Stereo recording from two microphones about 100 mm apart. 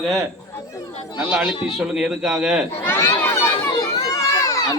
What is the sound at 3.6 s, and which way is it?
Crowd, 35° left (ahead or behind).